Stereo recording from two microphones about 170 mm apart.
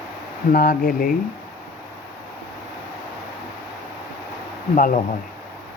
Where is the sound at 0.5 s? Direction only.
55° left (ahead or behind).